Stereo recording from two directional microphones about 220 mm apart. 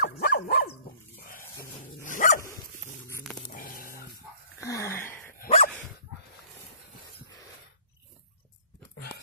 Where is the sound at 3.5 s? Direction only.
40° left (ahead or behind).